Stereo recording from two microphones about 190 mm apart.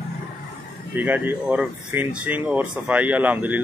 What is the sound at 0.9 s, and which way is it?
Speech, 10° right (ahead or behind).